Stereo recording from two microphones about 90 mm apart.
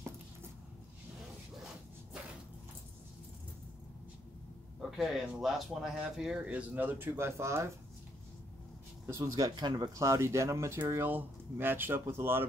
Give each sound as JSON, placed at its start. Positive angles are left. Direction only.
{"t": 4.7, "sound": "speech", "side_deg": -5}
{"t": 9.0, "sound": "speech", "side_deg": -35}